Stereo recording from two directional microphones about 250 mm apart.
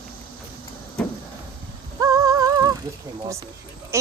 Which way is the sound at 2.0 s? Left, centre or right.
Centre.